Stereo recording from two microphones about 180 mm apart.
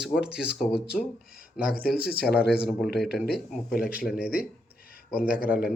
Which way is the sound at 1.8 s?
60° left (ahead or behind).